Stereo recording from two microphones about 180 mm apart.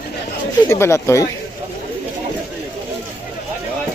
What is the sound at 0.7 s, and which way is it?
Speech, 15° left (ahead or behind).